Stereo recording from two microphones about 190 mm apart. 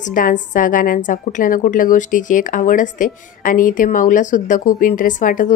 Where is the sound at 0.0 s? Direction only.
45° left (ahead or behind).